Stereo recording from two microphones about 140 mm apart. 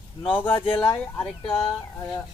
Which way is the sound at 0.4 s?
35° left (ahead or behind).